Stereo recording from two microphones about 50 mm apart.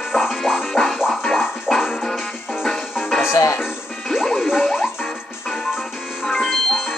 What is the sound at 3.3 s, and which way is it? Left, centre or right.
Music, left.